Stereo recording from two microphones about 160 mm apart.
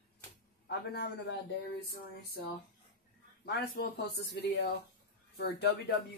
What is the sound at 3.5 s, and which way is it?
A man's voice, 90° left.